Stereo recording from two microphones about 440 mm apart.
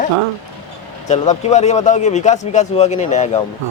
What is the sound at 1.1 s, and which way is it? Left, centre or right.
Speech, centre.